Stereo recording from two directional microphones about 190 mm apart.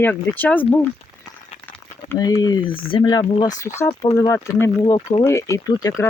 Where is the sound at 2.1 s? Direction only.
20° left (ahead or behind).